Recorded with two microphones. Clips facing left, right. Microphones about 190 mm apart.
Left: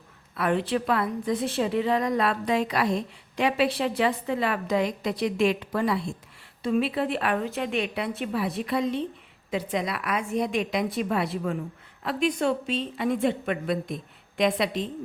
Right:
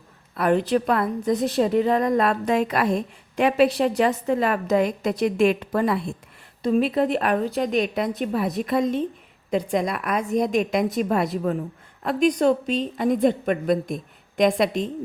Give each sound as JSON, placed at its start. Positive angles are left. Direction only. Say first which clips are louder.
{"t": 0.3, "sound": "a woman's voice", "louder": "right 5 dB", "side_deg": -40}
{"t": 6.6, "sound": "a woman's voice", "louder": "right 5 dB", "side_deg": -40}